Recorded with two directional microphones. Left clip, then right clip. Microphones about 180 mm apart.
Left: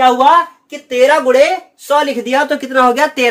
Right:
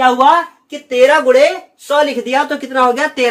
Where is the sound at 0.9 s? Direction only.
40° left (ahead or behind).